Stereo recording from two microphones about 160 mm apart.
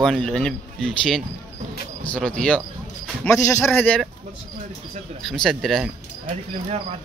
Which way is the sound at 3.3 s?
20° left (ahead or behind).